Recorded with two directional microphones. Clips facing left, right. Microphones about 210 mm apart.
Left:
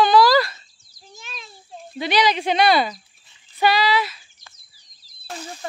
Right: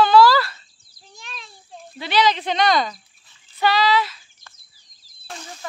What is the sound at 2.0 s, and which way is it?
Speech, 15° left (ahead or behind).